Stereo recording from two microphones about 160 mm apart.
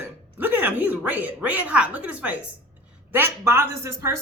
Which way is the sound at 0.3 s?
10° right (ahead or behind).